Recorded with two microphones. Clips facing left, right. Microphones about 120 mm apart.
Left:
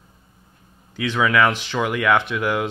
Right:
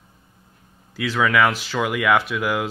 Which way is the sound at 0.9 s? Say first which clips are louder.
Even; 5° right (ahead or behind).